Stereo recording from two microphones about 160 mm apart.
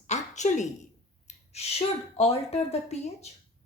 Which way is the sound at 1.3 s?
40° left (ahead or behind).